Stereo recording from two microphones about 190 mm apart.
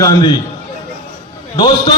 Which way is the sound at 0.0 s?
20° left (ahead or behind).